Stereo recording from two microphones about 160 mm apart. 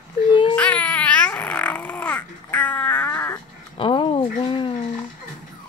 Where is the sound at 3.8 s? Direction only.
30° left (ahead or behind).